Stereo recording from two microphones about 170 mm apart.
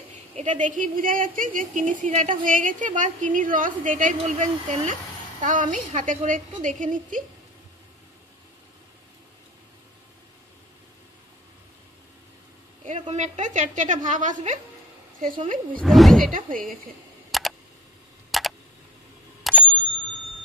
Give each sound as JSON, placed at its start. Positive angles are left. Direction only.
{"t": 0.4, "sound": "speech", "side_deg": -45}
{"t": 13.1, "sound": "speech", "side_deg": -45}
{"t": 15.8, "sound": "speech", "side_deg": 0}
{"t": 16.3, "sound": "speech", "side_deg": -55}
{"t": 17.3, "sound": "a sound", "side_deg": 0}
{"t": 18.3, "sound": "tick", "side_deg": 0}
{"t": 19.4, "sound": "bicycle bell", "side_deg": 5}